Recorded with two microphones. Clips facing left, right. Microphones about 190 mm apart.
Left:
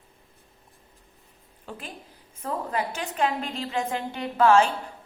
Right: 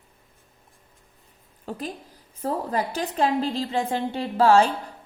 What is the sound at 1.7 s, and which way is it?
A woman's voice, 40° right (ahead or behind).